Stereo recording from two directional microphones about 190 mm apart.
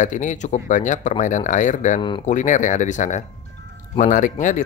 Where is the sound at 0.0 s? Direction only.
40° left (ahead or behind).